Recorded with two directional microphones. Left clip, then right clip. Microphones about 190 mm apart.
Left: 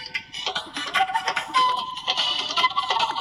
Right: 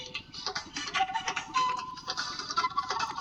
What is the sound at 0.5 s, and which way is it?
Music, 45° left (ahead or behind).